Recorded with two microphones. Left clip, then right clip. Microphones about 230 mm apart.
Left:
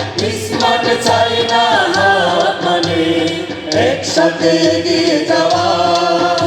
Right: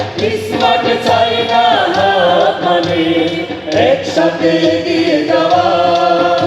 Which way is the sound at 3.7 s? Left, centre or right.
Left.